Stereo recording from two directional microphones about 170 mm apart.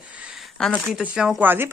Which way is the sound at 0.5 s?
5° left (ahead or behind).